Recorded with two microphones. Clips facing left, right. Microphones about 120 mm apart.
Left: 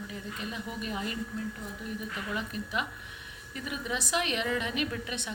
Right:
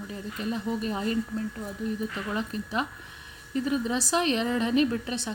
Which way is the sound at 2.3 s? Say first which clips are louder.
Right 3 dB; 35° right (ahead or behind).